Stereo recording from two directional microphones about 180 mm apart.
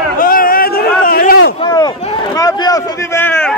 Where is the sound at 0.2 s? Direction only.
50° left (ahead or behind).